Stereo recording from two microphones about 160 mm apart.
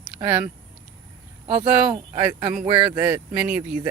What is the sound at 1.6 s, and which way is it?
Speech, 10° right (ahead or behind).